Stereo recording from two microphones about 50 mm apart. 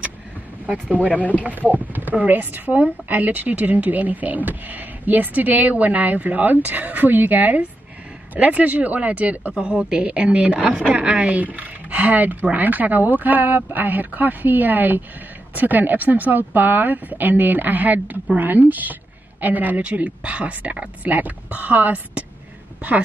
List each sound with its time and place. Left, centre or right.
1.4 s speech: right
9.6 s a woman's voice: right
11.9 s speech: right